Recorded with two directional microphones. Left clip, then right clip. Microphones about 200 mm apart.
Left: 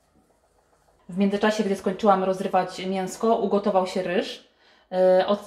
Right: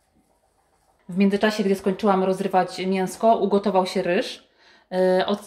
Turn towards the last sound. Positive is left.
turn(degrees=-50)  # may be behind; listen again after turning